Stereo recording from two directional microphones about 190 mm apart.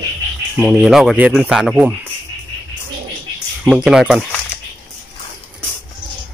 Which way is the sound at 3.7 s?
5° right (ahead or behind).